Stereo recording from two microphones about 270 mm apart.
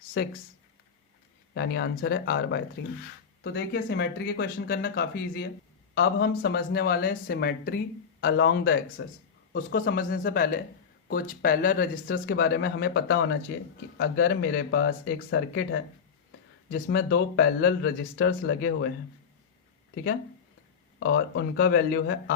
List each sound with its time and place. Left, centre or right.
0.2 s speech: left
1.5 s speech: left
21.0 s speech: left